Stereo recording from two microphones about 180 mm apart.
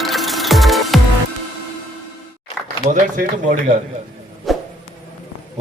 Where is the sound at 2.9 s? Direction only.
45° right (ahead or behind).